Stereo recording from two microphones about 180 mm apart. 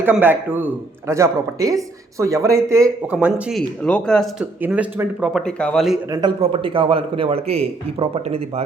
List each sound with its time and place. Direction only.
0.0 s a man's voice: 10° right (ahead or behind)
3.8 s speech: 5° left (ahead or behind)
4.6 s speech: 10° right (ahead or behind)
6.1 s a man's voice: 20° right (ahead or behind)